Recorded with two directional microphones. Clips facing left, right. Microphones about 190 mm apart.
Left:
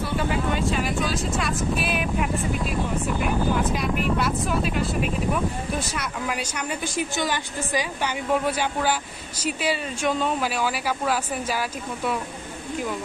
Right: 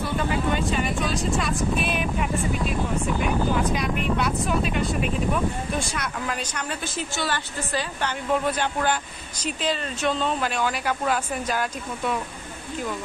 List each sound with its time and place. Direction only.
0.6 s speech: centre (ahead or behind)
3.7 s speech: centre (ahead or behind)